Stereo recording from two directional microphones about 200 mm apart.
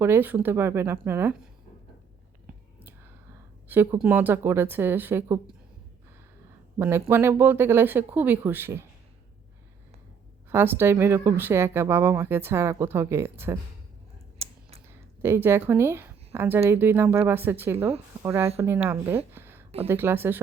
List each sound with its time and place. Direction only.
0.0 s speech: 10° right (ahead or behind)
3.7 s speech: 10° right (ahead or behind)
6.7 s speech: 10° right (ahead or behind)
10.5 s speech: 10° right (ahead or behind)
14.3 s a sound: 30° right (ahead or behind)
15.2 s speech: 10° right (ahead or behind)